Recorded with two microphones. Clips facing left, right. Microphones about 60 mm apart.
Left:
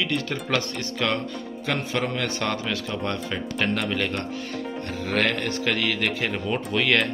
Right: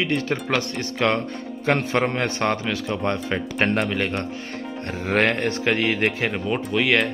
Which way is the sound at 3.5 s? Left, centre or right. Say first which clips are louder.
Right 4 dB; right.